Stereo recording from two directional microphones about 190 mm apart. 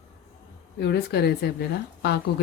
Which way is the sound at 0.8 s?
60° left (ahead or behind).